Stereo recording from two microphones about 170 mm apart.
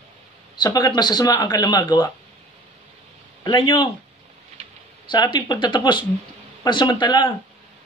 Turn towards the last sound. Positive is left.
turn(degrees=25)  # may be behind; listen again after turning